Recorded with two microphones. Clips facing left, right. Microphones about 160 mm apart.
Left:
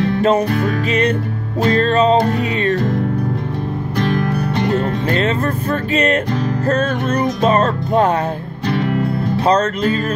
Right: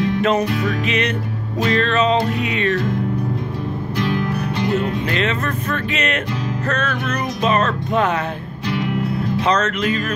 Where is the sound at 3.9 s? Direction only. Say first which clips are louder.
Left 3 dB; 50° left (ahead or behind).